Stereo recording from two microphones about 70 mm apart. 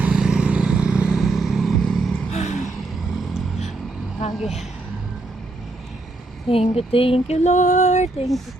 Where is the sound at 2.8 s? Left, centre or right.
Centre.